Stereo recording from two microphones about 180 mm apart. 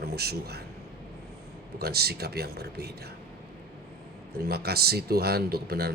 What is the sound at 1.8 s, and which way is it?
A man's voice, 60° right (ahead or behind).